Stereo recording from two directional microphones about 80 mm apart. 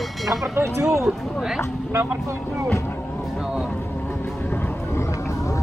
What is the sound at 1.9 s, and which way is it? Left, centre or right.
Speech, right.